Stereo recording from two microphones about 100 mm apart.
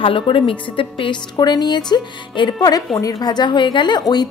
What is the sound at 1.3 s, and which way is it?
A woman's voice, 45° left (ahead or behind).